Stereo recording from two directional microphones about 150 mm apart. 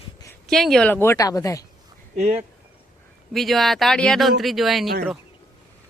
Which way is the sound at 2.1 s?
45° right (ahead or behind).